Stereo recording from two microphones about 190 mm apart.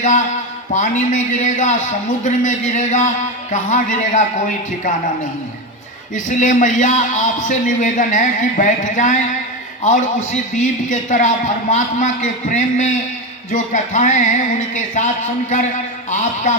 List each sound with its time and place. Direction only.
0.0 s a man's voice: 40° left (ahead or behind)
6.1 s a man's voice: 40° left (ahead or behind)
10.3 s a man's voice: 40° left (ahead or behind)